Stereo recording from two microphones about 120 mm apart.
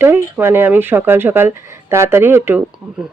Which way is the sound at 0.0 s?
20° right (ahead or behind).